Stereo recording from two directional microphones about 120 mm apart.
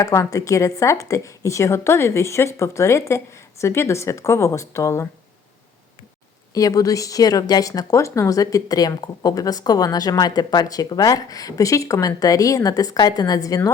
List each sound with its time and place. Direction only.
0.0 s speech: 25° left (ahead or behind)
6.5 s speech: 30° left (ahead or behind)